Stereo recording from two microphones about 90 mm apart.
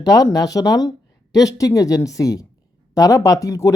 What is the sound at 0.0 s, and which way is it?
Speech, 40° left (ahead or behind).